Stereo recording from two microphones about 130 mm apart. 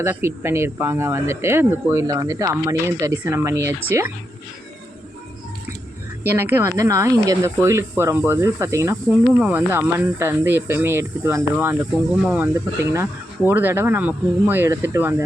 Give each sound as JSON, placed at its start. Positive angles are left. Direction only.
{"t": 0.0, "sound": "speech", "side_deg": -20}
{"t": 6.2, "sound": "speech", "side_deg": -15}
{"t": 9.0, "sound": "speech", "side_deg": -10}
{"t": 12.1, "sound": "speech", "side_deg": -5}
{"t": 12.5, "sound": "speech", "side_deg": -20}